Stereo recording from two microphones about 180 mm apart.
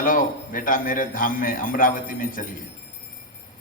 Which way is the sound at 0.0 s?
50° left (ahead or behind).